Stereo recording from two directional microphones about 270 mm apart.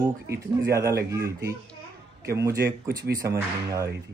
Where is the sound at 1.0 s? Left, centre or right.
Centre.